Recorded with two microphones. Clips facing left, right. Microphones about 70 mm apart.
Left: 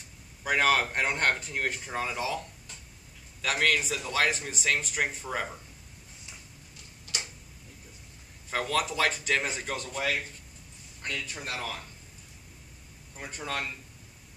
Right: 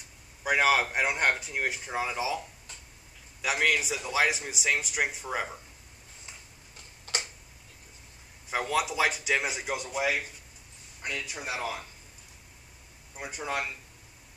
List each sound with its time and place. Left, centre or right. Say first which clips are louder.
0.4 s speech: right 1 dB; centre
7.1 s tick-tock: right 3 dB; right
8.5 s speech: right 1 dB; centre
13.1 s speech: right 2 dB; centre